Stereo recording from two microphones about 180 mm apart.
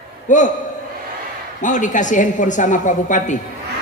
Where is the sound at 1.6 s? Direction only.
45° left (ahead or behind).